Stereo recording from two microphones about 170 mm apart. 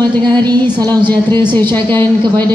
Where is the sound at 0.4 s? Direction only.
25° right (ahead or behind).